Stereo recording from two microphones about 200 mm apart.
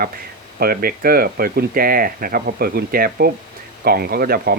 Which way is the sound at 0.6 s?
45° right (ahead or behind).